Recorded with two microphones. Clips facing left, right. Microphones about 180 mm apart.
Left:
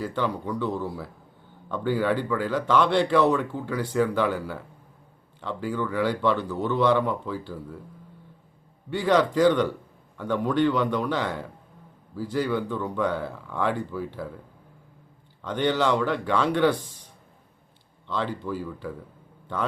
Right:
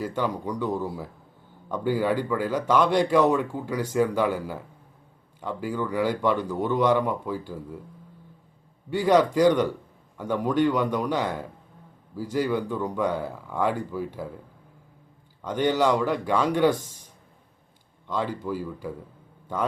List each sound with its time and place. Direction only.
0.2 s a man's voice: 15° right (ahead or behind)
2.8 s speech: 40° right (ahead or behind)
3.3 s a man's voice: 10° right (ahead or behind)
8.9 s a man's voice: 10° right (ahead or behind)
15.4 s a man's voice: 10° right (ahead or behind)
16.6 s speech: 45° right (ahead or behind)
18.1 s a man's voice: 10° right (ahead or behind)